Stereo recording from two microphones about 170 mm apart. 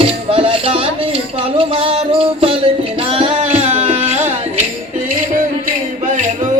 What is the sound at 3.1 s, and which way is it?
Carnatic music, 35° right (ahead or behind).